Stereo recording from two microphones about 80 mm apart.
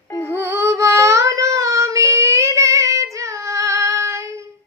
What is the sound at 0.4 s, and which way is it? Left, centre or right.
Child singing, right.